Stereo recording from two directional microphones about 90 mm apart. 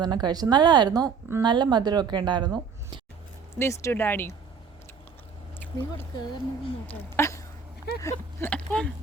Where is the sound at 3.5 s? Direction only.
30° left (ahead or behind).